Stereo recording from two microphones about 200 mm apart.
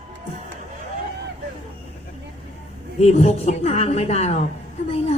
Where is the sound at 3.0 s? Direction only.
30° left (ahead or behind).